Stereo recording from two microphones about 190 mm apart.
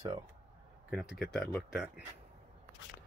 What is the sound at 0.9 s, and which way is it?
Speech, centre (ahead or behind).